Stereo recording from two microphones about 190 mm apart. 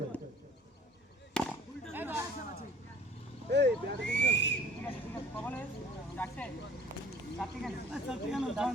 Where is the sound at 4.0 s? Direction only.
65° left (ahead or behind).